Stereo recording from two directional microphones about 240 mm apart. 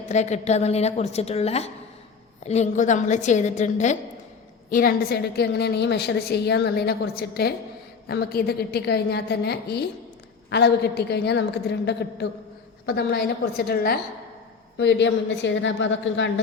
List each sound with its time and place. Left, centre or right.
0.0 s a woman's voice: left